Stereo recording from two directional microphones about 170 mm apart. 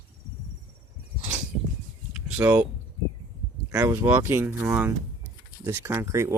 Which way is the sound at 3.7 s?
15° right (ahead or behind).